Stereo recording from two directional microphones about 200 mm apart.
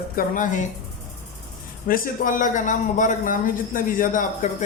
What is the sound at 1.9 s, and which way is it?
Speech, 45° left (ahead or behind).